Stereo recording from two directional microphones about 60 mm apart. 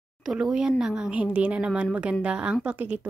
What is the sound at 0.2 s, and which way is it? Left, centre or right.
Speech, centre.